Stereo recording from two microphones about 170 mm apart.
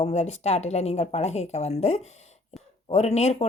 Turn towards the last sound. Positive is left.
turn(degrees=40)  # may be behind; listen again after turning